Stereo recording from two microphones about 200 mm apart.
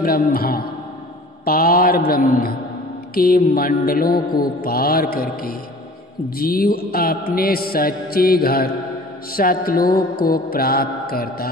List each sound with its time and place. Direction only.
0.0 s mantra: 45° left (ahead or behind)